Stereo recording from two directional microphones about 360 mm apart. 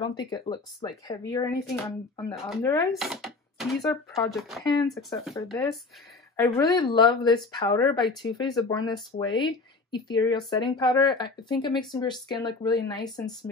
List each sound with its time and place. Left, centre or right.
0.0 s speech: centre